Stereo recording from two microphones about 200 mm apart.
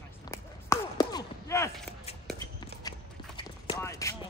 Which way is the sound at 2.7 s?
55° right (ahead or behind).